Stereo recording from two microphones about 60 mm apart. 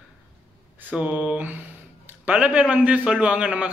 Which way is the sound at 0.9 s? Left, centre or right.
Right.